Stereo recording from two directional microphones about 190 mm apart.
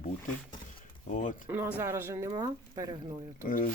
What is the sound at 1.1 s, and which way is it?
Speech, 40° left (ahead or behind).